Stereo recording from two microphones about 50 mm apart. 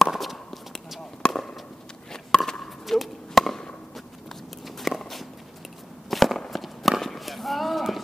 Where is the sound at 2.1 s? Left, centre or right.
Centre.